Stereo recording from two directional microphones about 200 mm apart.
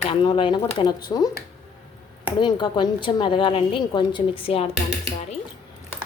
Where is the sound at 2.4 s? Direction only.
20° left (ahead or behind).